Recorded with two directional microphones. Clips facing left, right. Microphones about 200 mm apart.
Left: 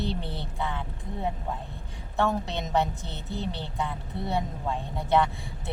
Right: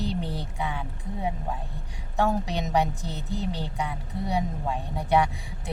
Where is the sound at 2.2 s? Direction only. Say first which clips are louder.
Right 1 dB; 15° right (ahead or behind).